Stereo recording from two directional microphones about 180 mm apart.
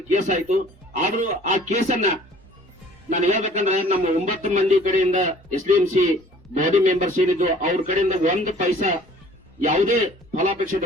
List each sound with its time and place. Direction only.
0.1 s a man's voice: 45° right (ahead or behind)
3.1 s a man's voice: 40° right (ahead or behind)